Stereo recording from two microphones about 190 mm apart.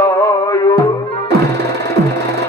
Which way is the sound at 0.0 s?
25° left (ahead or behind).